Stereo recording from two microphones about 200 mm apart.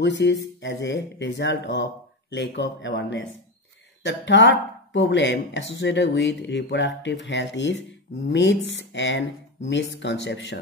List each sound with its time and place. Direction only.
0.0 s speech: 65° left (ahead or behind)